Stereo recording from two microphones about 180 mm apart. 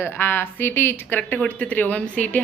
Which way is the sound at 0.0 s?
10° left (ahead or behind).